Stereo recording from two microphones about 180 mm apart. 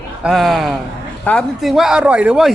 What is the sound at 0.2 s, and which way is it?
Speech, centre (ahead or behind).